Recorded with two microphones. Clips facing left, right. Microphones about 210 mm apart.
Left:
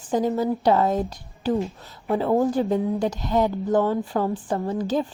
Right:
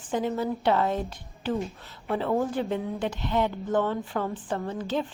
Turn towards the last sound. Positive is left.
turn(degrees=40)  # may be behind; listen again after turning